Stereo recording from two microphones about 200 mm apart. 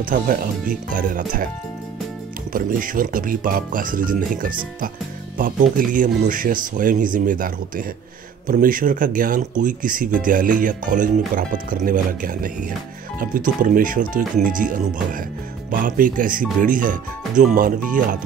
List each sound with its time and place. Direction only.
0.0 s speech: 45° right (ahead or behind)
2.5 s speech: 45° right (ahead or behind)